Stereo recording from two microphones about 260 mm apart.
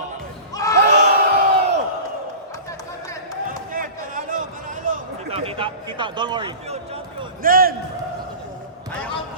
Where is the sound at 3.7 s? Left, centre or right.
Right.